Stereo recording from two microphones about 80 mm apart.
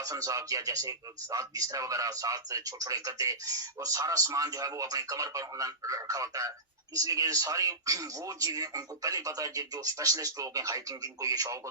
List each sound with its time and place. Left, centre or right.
0.0 s speech: right